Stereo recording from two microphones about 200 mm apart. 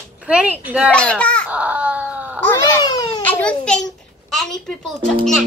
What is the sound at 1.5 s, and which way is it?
Baby cry, 5° right (ahead or behind).